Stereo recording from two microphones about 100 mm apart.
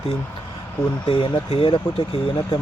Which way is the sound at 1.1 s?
65° left (ahead or behind).